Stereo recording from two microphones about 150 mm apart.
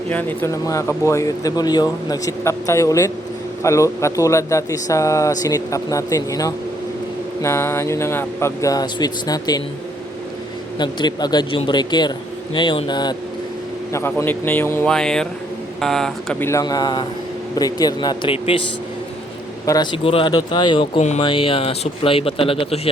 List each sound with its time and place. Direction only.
0.1 s speech: 10° left (ahead or behind)
10.8 s speech: 30° left (ahead or behind)
13.9 s speech: 15° left (ahead or behind)
16.5 s speech: 25° left (ahead or behind)
19.6 s speech: 25° left (ahead or behind)